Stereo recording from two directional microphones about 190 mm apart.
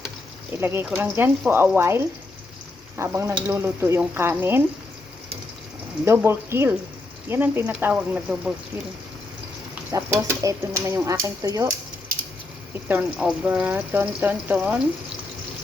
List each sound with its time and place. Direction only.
0.5 s speech: 10° right (ahead or behind)
3.0 s speech: 15° right (ahead or behind)
6.1 s speech: 15° right (ahead or behind)
9.9 s speech: 15° right (ahead or behind)
12.9 s speech: 5° right (ahead or behind)